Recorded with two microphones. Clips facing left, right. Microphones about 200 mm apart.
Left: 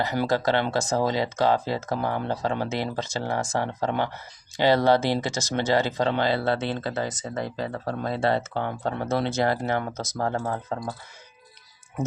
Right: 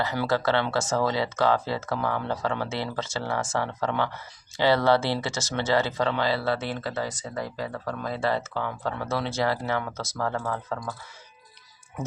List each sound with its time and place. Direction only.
0.0 s speech: 15° left (ahead or behind)